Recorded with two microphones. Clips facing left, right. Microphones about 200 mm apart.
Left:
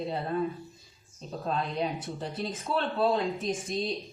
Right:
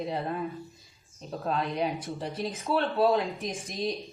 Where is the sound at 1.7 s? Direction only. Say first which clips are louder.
Right 1 dB; 15° right (ahead or behind).